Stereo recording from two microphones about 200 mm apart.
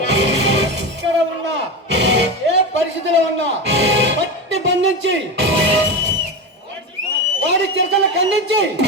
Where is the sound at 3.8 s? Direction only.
65° right (ahead or behind).